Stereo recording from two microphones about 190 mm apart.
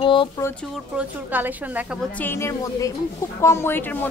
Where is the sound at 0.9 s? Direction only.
10° right (ahead or behind).